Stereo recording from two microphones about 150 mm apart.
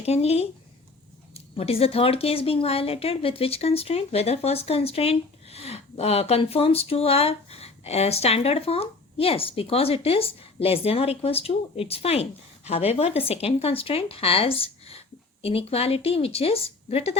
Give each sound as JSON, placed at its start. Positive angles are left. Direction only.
{"t": 0.0, "sound": "speech", "side_deg": 45}